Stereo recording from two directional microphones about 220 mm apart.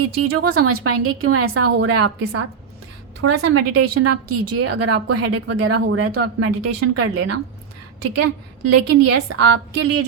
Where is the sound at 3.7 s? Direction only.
90° right.